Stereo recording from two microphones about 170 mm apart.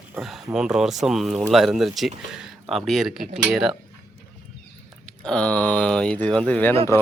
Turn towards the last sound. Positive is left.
turn(degrees=15)  # may be behind; listen again after turning